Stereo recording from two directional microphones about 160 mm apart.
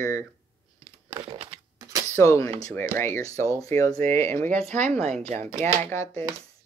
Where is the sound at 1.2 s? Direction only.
30° right (ahead or behind).